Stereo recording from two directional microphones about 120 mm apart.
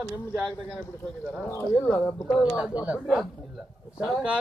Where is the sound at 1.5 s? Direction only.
20° left (ahead or behind).